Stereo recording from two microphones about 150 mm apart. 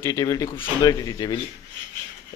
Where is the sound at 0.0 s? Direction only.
25° left (ahead or behind).